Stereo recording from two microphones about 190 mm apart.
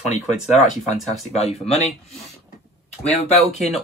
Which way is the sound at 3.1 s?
35° left (ahead or behind).